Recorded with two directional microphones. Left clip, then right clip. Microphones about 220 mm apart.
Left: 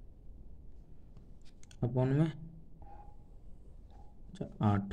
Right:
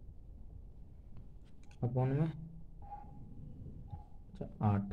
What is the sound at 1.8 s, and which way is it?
Speech, 55° left (ahead or behind).